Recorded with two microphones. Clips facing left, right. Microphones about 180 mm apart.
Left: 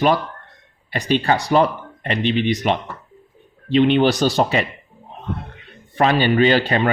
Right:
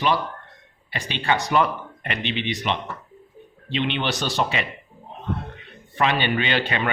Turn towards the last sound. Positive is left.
turn(degrees=35)  # may be behind; listen again after turning